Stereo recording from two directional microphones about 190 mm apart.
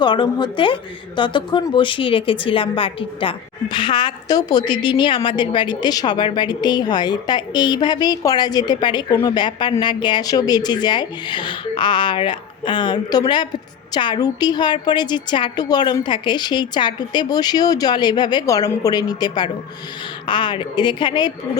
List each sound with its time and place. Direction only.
0.0 s speech: 25° left (ahead or behind)